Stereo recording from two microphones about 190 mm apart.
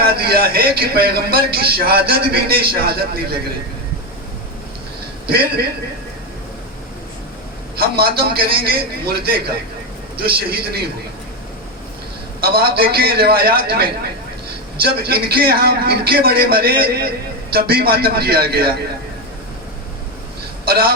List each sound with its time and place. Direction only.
0.0 s speech: 55° right (ahead or behind)
5.2 s a man's voice: 55° right (ahead or behind)
7.8 s a man's voice: 55° right (ahead or behind)
12.4 s a man's voice: 55° right (ahead or behind)
20.7 s speech: 50° right (ahead or behind)